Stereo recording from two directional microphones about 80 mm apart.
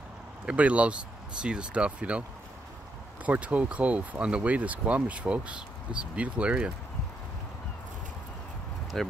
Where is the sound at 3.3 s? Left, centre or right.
Centre.